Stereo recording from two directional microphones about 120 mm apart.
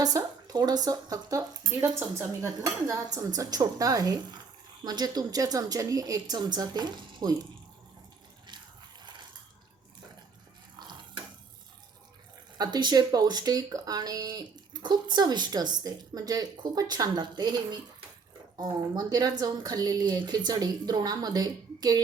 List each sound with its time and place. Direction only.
0.0 s speech: 30° right (ahead or behind)
12.5 s speech: 35° right (ahead or behind)